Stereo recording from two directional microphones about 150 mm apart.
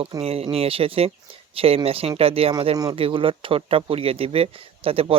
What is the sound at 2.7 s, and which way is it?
Speech, 25° right (ahead or behind).